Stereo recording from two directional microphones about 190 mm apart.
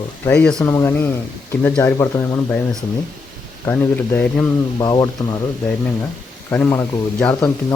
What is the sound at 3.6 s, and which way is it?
Speech, 10° left (ahead or behind).